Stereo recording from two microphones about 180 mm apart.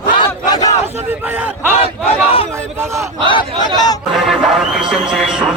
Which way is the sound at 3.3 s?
25° left (ahead or behind).